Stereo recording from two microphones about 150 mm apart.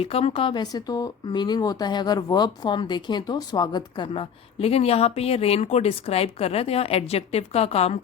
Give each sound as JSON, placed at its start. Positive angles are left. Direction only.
{"t": 0.0, "sound": "speech", "side_deg": 40}